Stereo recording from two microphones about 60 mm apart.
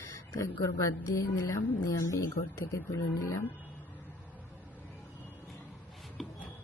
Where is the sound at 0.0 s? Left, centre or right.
Left.